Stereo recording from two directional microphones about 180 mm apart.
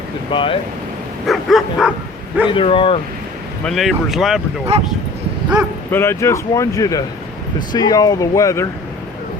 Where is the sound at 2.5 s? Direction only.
30° left (ahead or behind).